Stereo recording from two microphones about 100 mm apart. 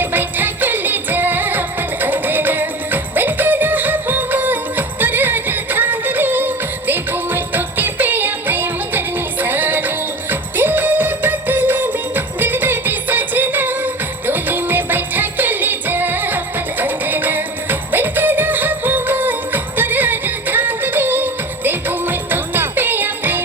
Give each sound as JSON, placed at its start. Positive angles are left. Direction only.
{"t": 0.0, "sound": "music", "side_deg": -20}